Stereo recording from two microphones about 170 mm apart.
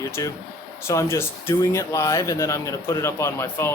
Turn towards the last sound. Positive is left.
turn(degrees=15)  # may be behind; listen again after turning